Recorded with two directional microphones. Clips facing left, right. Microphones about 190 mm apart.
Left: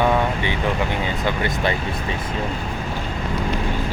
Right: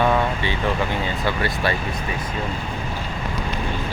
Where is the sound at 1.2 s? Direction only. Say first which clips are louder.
Left 1 dB; 20° left (ahead or behind).